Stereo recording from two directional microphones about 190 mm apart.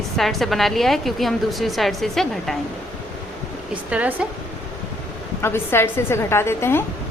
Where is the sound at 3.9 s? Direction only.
5° right (ahead or behind).